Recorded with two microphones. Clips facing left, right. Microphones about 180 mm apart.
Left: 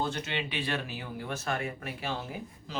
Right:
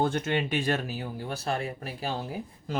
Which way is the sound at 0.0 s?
50° right (ahead or behind).